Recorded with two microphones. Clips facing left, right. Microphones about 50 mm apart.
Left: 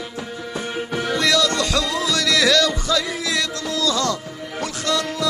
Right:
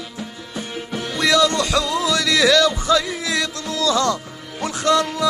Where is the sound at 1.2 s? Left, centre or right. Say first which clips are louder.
Right 3 dB; centre.